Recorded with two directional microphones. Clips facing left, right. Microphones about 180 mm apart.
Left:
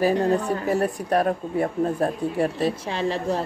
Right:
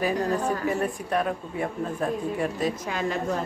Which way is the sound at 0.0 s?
30° left (ahead or behind).